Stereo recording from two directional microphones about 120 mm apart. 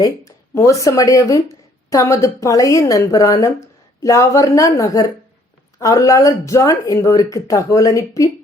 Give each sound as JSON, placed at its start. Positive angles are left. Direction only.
{"t": 0.0, "sound": "a woman's voice", "side_deg": 25}